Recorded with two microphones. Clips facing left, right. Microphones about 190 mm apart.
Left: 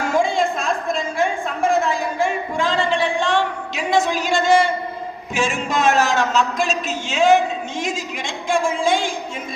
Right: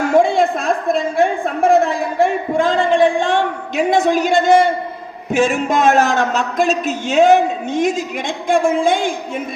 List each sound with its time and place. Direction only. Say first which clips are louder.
0.1 s a woman's voice: right 6 dB; 60° right (ahead or behind)